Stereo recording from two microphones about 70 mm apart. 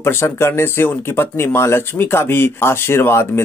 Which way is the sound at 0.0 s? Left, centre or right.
Left.